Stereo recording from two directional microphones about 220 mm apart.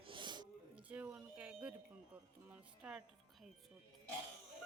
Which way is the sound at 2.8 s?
5° right (ahead or behind).